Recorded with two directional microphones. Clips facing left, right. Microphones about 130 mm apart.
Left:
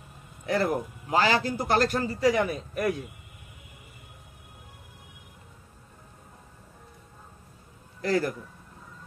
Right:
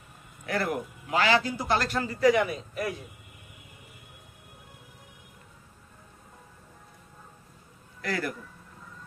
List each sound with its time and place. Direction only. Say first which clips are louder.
0.5 s a man's voice: left 3 dB; 35° left (ahead or behind); by 3.0 s 55° left (ahead or behind)
8.0 s speech: left 6 dB; 35° left (ahead or behind)